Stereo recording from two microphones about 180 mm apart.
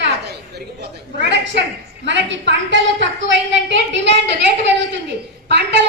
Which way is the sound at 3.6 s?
80° right.